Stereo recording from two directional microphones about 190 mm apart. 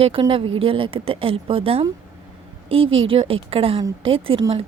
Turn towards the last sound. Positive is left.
turn(degrees=-30)  # may be behind; listen again after turning